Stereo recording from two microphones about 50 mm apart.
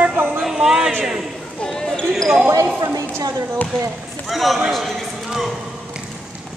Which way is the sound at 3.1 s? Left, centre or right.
Right.